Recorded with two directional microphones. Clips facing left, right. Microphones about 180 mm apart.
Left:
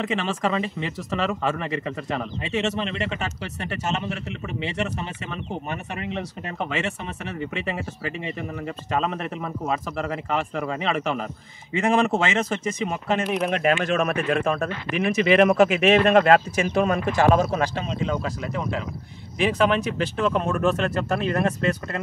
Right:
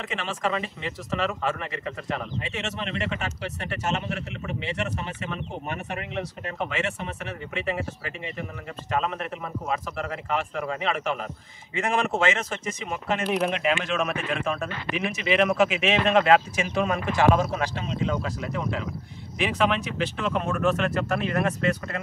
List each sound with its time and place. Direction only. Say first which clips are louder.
0.1 s speech: right 1 dB; 30° left (ahead or behind)
13.2 s speech: even; centre (ahead or behind)
13.5 s speech: left 4 dB; 50° left (ahead or behind)